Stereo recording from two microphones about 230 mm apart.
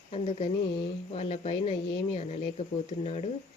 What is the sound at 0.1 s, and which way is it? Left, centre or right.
Speech, left.